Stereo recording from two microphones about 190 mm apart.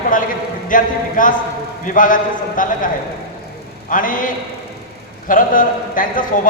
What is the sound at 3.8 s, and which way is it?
Speech, 45° left (ahead or behind).